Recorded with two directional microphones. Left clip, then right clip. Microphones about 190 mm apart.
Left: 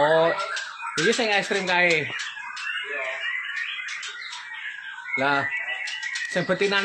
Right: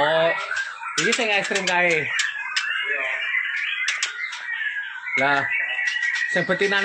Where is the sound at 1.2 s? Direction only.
15° left (ahead or behind).